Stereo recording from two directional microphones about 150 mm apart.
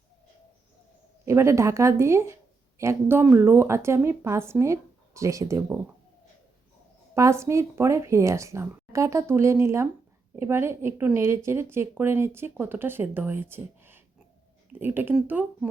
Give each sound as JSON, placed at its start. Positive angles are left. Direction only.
{"t": 1.2, "sound": "speech", "side_deg": -20}
{"t": 7.1, "sound": "speech", "side_deg": -20}